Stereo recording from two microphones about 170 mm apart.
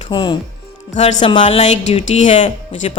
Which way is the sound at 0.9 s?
40° left (ahead or behind).